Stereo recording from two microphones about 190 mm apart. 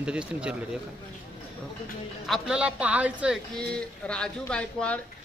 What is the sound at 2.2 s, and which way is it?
Speech, 5° right (ahead or behind).